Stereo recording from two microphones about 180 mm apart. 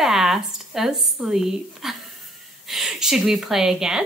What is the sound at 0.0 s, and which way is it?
Speech, centre (ahead or behind).